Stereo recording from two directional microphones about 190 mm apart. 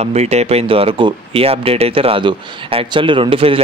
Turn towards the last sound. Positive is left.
turn(degrees=-30)  # may be behind; listen again after turning